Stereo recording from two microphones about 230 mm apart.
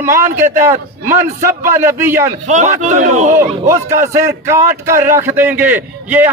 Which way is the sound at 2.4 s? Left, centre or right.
Right.